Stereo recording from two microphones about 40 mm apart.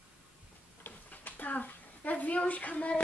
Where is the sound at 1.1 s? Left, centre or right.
Left.